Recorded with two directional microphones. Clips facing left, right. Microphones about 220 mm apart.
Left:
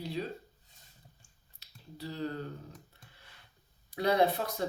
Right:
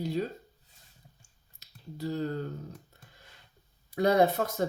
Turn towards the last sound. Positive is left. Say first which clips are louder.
# right 4 dB
turn(degrees=-45)  # may be behind; listen again after turning